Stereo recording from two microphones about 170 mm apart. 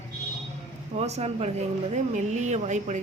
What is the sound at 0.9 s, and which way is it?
Speech, 40° right (ahead or behind).